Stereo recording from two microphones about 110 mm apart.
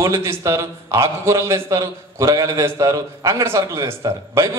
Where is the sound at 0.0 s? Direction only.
25° right (ahead or behind).